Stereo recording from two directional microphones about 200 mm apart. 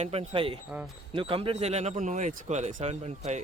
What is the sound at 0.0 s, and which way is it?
Speech, 30° right (ahead or behind).